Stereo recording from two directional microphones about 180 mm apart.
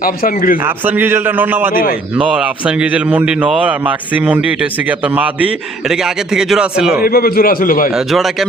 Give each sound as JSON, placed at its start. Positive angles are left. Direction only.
{"t": 0.0, "sound": "a man's voice", "side_deg": 50}
{"t": 0.6, "sound": "a man's voice", "side_deg": -10}
{"t": 1.7, "sound": "a man's voice", "side_deg": 50}
{"t": 2.1, "sound": "a man's voice", "side_deg": -5}
{"t": 7.0, "sound": "a man's voice", "side_deg": 55}
{"t": 7.9, "sound": "a man's voice", "side_deg": 0}